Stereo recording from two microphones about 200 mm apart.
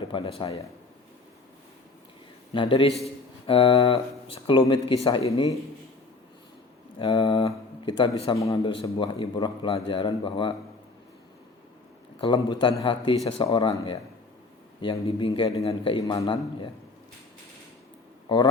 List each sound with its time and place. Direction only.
0.1 s a man's voice: 25° left (ahead or behind)
2.5 s a man's voice: 25° left (ahead or behind)
7.0 s a man's voice: 20° left (ahead or behind)
12.2 s a man's voice: 25° left (ahead or behind)
18.3 s a man's voice: 25° left (ahead or behind)